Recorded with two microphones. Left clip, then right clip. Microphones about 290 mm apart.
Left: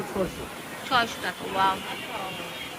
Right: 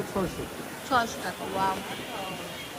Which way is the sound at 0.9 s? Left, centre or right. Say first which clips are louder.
Left 2 dB; centre.